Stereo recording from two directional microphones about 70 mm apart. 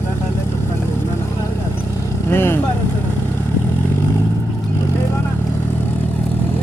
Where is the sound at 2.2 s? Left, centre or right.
Left.